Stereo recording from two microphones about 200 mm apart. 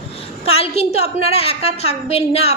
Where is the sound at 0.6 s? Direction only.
30° left (ahead or behind).